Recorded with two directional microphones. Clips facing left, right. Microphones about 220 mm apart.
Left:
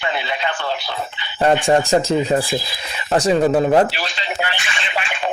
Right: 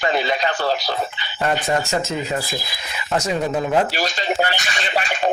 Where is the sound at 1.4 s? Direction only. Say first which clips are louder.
Left 6 dB; 30° left (ahead or behind).